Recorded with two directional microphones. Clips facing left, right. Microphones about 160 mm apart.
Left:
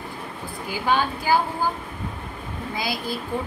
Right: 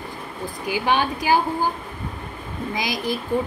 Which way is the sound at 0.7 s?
20° right (ahead or behind).